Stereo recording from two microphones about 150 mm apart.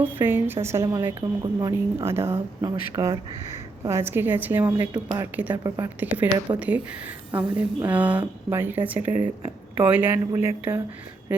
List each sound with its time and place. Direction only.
0.0 s a woman's voice: 15° right (ahead or behind)
6.2 s speech: 25° right (ahead or behind)
6.6 s a woman's voice: 10° right (ahead or behind)